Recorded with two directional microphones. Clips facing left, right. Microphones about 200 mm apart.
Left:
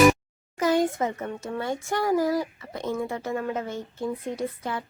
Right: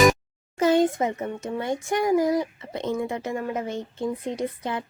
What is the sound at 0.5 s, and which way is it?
Speech, 25° right (ahead or behind).